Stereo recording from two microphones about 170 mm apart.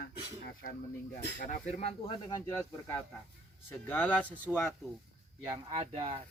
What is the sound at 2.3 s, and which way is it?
Speech, 20° left (ahead or behind).